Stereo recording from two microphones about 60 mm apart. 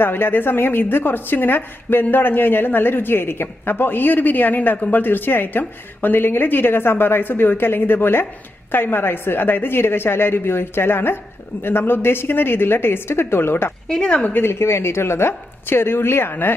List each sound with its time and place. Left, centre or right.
0.0 s a woman's voice: left
13.8 s speech: centre
14.4 s a woman's voice: left